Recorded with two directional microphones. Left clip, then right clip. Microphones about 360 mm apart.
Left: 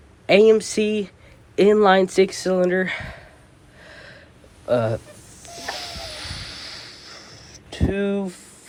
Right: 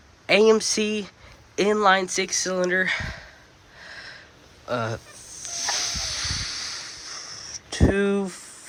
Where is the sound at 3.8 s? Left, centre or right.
Centre.